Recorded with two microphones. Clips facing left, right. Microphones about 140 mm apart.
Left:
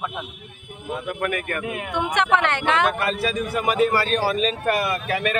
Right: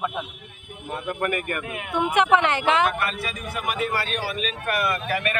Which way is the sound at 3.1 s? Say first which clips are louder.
Left 7 dB; 35° left (ahead or behind).